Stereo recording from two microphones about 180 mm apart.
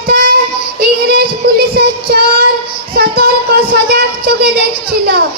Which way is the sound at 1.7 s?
60° right (ahead or behind).